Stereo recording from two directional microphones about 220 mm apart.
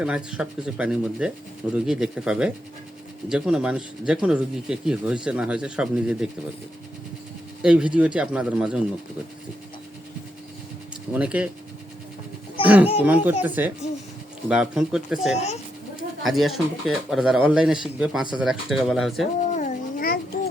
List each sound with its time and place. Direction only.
0.0 s speech: 5° right (ahead or behind)
7.6 s speech: 5° right (ahead or behind)
11.1 s speech: 5° right (ahead or behind)
12.6 s speech: 5° right (ahead or behind)
15.4 s speech: 30° left (ahead or behind)
16.2 s speech: centre (ahead or behind)
19.5 s a sound: 40° left (ahead or behind)